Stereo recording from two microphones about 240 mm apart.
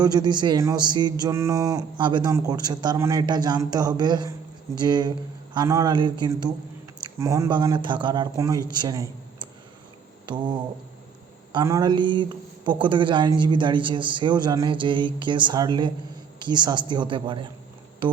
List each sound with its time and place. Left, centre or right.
0.0 s speech: centre